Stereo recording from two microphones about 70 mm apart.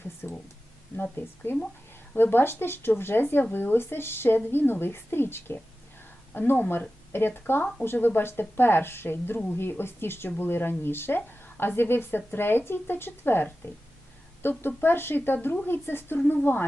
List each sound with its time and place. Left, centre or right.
0.2 s a woman's voice: left
1.2 s a woman's voice: left